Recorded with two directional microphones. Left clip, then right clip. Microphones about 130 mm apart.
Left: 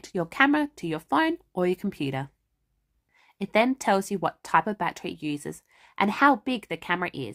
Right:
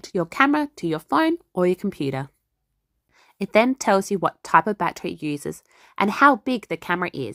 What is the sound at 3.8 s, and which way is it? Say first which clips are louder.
Speech: right 5 dB; 30° right (ahead or behind).